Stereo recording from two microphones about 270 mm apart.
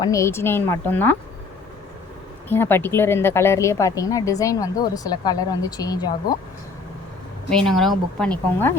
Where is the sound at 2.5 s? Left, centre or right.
Centre.